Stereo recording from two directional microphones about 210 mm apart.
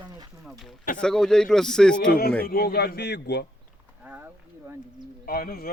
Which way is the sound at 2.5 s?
50° left (ahead or behind).